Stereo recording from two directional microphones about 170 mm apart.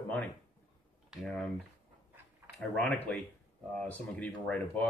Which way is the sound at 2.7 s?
5° left (ahead or behind).